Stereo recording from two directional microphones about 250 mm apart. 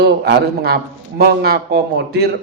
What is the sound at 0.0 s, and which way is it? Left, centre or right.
A man's voice, right.